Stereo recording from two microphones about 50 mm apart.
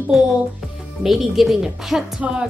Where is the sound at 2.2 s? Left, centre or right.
Centre.